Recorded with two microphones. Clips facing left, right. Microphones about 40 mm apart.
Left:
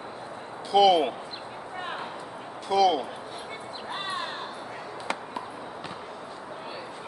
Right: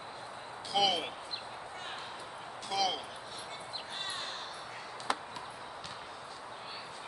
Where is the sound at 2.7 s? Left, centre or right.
Centre.